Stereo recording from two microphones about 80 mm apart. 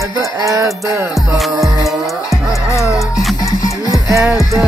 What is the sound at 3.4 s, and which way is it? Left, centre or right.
Music, left.